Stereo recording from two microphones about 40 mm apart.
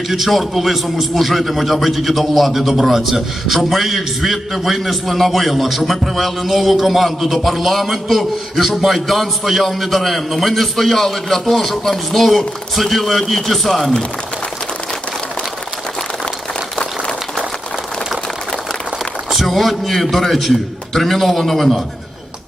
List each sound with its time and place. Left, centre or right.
0.1 s a man's voice: centre
16.7 s applause: centre
19.3 s a man's voice: centre